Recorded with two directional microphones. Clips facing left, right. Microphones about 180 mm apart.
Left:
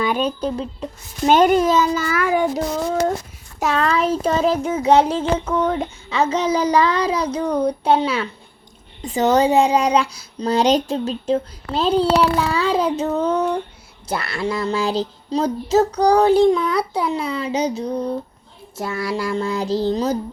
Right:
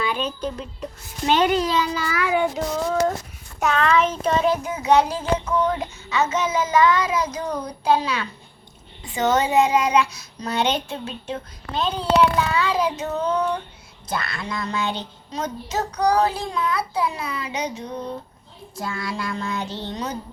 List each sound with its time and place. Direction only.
0.0 s child singing: 45° left (ahead or behind)
1.3 s a child's voice: 45° left (ahead or behind)
3.6 s child singing: 35° left (ahead or behind)
14.1 s a child's voice: 30° left (ahead or behind)
16.7 s child singing: 30° left (ahead or behind)